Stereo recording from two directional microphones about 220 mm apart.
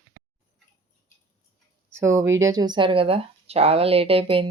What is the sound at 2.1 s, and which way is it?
Speech, 10° right (ahead or behind).